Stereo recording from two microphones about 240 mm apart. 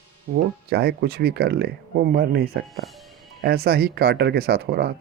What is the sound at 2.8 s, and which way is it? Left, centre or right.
Speech, centre.